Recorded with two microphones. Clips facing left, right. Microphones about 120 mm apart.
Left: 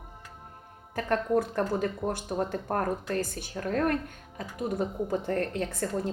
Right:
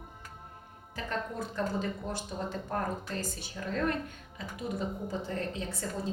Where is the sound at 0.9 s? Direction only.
55° left (ahead or behind).